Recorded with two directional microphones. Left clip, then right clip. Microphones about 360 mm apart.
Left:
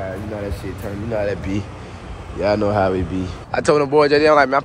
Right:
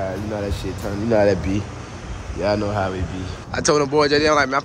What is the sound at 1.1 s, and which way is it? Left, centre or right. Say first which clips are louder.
Speech: right 5 dB; centre.